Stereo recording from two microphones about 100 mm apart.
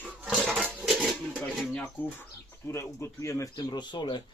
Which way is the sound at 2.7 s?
25° left (ahead or behind).